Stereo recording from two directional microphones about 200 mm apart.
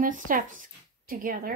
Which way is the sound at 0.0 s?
45° right (ahead or behind).